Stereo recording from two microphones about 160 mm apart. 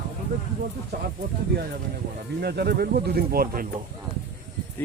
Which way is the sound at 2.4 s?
80° right.